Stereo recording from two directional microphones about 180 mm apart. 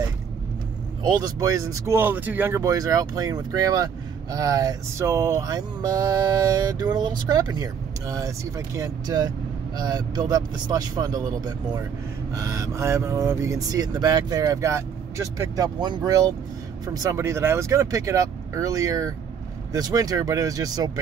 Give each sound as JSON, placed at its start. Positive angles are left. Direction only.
{"t": 1.0, "sound": "speech", "side_deg": -20}